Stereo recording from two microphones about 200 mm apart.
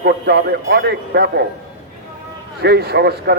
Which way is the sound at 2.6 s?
55° right (ahead or behind).